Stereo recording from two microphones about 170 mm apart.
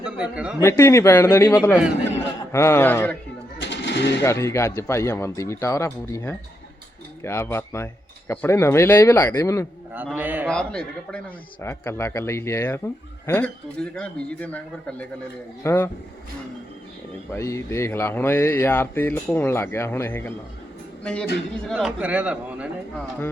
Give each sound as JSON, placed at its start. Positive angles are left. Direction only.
{"t": 0.0, "sound": "speech", "side_deg": -5}
{"t": 0.6, "sound": "speech", "side_deg": 15}
{"t": 3.6, "sound": "pigeon", "side_deg": 90}
{"t": 4.2, "sound": "speech", "side_deg": 15}
{"t": 10.2, "sound": "a man's voice", "side_deg": -10}
{"t": 10.5, "sound": "speech", "side_deg": 5}
{"t": 17.3, "sound": "a man's voice", "side_deg": 15}
{"t": 21.7, "sound": "a man's voice", "side_deg": -5}